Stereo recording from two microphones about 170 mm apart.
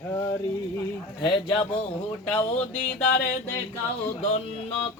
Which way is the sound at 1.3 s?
30° left (ahead or behind).